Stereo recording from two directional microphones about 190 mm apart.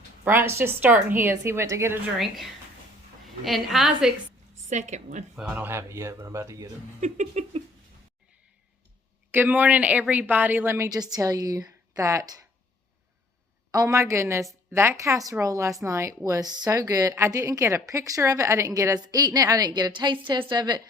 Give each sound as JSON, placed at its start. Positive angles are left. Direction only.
{"t": 0.3, "sound": "a woman's voice", "side_deg": -10}
{"t": 2.1, "sound": "a woman's voice", "side_deg": 0}
{"t": 4.7, "sound": "a sound", "side_deg": -40}
{"t": 5.4, "sound": "a woman's voice", "side_deg": -10}
{"t": 7.0, "sound": "a sound", "side_deg": -35}
{"t": 9.3, "sound": "a woman's voice", "side_deg": -10}
{"t": 13.7, "sound": "a woman's voice", "side_deg": -20}